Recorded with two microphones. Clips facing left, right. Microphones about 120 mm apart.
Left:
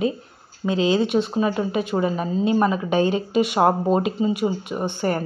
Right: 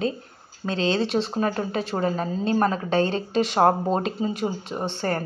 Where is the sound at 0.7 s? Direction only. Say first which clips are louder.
Left 4 dB; 10° left (ahead or behind).